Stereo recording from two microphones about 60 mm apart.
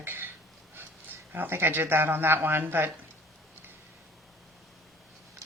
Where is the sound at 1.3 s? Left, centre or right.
Right.